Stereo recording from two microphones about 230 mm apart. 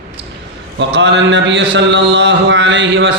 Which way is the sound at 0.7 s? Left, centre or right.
Right.